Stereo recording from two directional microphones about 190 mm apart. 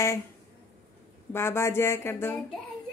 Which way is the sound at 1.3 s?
15° left (ahead or behind).